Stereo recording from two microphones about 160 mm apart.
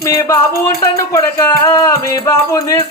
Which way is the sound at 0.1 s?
20° left (ahead or behind).